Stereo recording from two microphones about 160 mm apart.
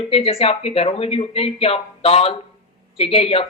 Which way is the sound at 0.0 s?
35° left (ahead or behind).